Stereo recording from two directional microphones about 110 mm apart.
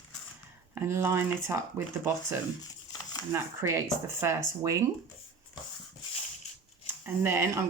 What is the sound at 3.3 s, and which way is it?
Speech, 20° right (ahead or behind).